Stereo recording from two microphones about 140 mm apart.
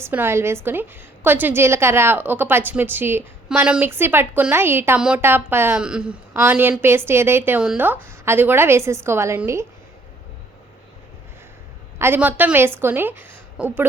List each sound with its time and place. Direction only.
0.0 s a woman's voice: 15° right (ahead or behind)
11.9 s a woman's voice: 15° right (ahead or behind)